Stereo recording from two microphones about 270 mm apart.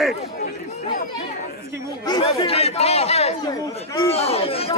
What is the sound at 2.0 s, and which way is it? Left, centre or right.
Speech, centre.